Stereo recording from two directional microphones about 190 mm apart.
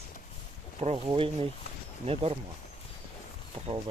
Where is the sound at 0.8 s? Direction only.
30° right (ahead or behind).